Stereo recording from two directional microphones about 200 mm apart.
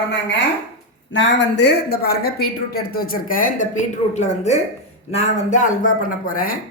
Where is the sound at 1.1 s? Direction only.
60° left (ahead or behind).